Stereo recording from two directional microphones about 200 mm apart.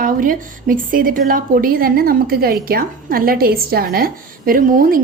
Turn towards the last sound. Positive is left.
turn(degrees=-45)  # may be behind; listen again after turning